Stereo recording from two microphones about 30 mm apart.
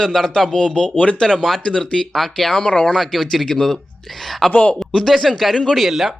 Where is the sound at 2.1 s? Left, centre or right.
Centre.